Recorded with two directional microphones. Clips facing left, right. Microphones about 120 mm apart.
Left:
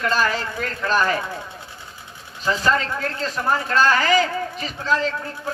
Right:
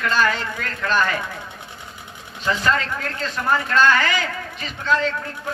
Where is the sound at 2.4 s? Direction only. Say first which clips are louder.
Left 1 dB; 35° left (ahead or behind).